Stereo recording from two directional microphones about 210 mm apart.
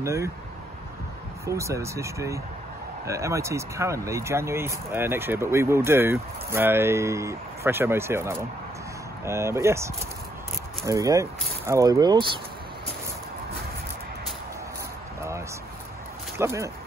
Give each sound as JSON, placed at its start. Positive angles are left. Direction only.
{"t": 0.0, "sound": "speech", "side_deg": -15}
{"t": 1.4, "sound": "speech", "side_deg": -15}
{"t": 10.9, "sound": "speech", "side_deg": -15}
{"t": 16.3, "sound": "speech", "side_deg": -15}